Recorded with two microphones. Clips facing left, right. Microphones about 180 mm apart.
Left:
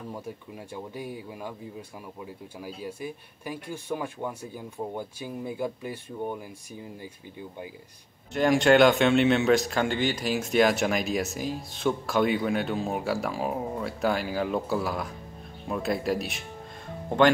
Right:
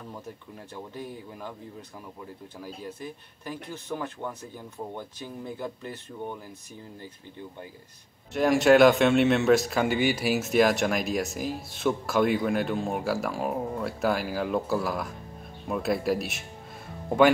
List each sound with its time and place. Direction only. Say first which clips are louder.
0.7 s speech: left 2 dB; 10° left (ahead or behind)
8.3 s speech: right 1 dB; centre (ahead or behind)